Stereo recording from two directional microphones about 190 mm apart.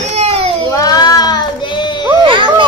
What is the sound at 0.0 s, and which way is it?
Baby cry, 35° right (ahead or behind).